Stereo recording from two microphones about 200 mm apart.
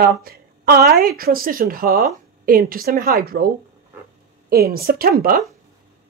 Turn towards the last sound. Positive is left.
turn(degrees=-50)  # may be behind; listen again after turning